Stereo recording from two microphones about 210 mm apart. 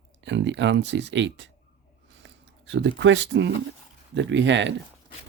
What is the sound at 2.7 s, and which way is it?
Speech, 55° right (ahead or behind).